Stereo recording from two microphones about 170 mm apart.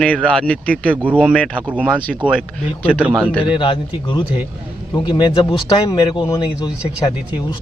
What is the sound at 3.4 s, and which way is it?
Speech, 30° left (ahead or behind).